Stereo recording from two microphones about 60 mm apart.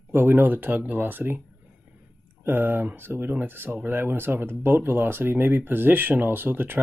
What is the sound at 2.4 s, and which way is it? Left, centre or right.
Speech, right.